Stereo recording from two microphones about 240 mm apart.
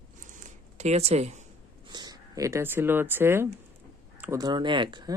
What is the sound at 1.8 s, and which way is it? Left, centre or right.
Speech, centre.